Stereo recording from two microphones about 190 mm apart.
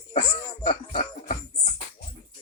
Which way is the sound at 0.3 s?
20° left (ahead or behind).